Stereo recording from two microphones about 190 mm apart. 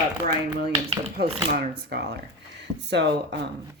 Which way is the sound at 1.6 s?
60° right (ahead or behind).